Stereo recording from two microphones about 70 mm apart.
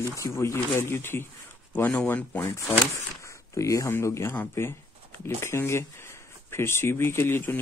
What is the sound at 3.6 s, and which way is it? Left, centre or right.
Speech, left.